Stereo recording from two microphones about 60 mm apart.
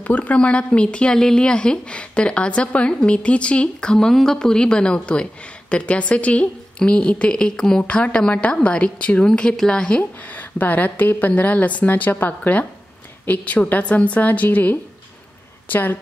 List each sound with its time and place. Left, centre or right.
0.0 s a woman's voice: left
10.2 s a woman's voice: left